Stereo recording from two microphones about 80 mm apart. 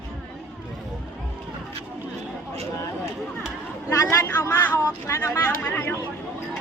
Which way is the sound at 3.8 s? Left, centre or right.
Left.